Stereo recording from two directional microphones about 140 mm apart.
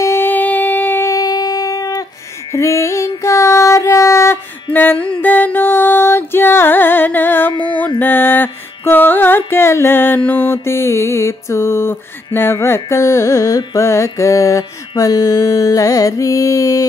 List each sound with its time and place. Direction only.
0.0 s music: 15° left (ahead or behind)
7.5 s music: 35° left (ahead or behind)
8.0 s music: 15° left (ahead or behind)